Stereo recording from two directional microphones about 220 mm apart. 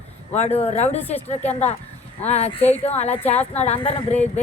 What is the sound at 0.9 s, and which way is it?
Speech, 10° left (ahead or behind).